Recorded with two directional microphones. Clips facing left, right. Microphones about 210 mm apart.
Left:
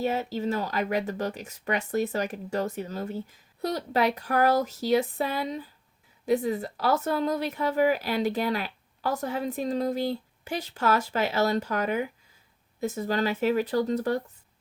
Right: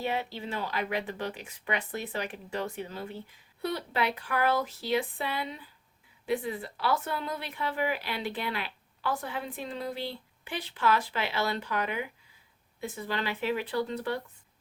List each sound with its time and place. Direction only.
0.0 s speech: 40° left (ahead or behind)